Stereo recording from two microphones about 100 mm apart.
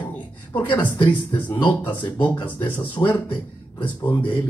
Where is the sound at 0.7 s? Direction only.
50° left (ahead or behind).